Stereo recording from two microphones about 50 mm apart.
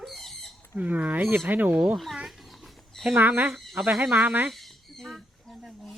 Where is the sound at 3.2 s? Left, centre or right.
Right.